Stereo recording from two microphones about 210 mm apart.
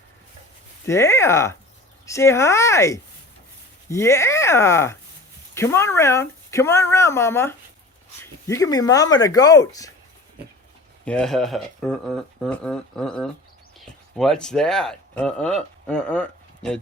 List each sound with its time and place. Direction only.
0.9 s speech: 15° left (ahead or behind)
11.0 s speech: 5° left (ahead or behind)